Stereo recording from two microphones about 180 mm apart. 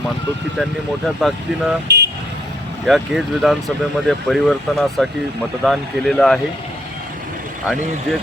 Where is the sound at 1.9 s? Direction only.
70° right (ahead or behind).